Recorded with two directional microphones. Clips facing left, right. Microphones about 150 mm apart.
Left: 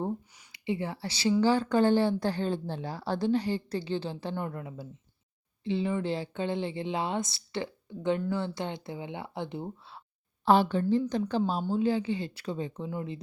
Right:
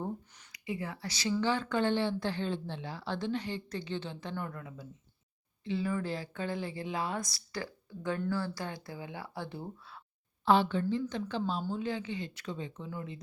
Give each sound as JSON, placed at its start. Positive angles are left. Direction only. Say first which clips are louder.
{"t": 0.5, "sound": "speech", "louder": "left 6 dB", "side_deg": 30}
{"t": 10.4, "sound": "speech", "louder": "left 3 dB", "side_deg": 40}
{"t": 12.9, "sound": "speech", "louder": "left 6 dB", "side_deg": 25}